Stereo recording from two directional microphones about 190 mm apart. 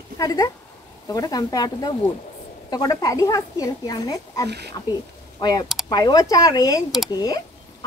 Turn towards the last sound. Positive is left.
turn(degrees=20)  # may be behind; listen again after turning